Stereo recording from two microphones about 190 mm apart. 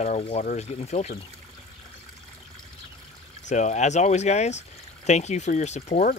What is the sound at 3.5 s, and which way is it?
Speech, 40° left (ahead or behind).